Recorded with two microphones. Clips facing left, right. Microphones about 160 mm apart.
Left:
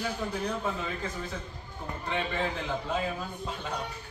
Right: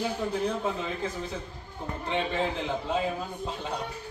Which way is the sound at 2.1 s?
20° right (ahead or behind).